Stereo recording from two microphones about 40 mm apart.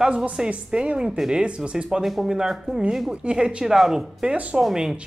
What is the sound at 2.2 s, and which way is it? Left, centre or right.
A woman's voice, centre.